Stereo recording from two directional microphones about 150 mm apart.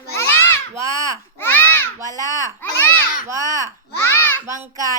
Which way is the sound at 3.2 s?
20° right (ahead or behind).